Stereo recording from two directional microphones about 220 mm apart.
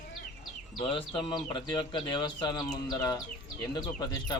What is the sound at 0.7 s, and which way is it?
Speech, 25° left (ahead or behind).